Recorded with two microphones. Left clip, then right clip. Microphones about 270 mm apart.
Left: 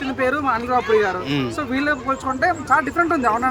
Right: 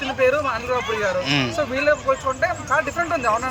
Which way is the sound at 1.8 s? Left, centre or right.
Centre.